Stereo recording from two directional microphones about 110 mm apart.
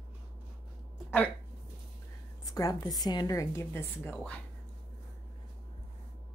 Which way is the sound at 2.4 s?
35° left (ahead or behind).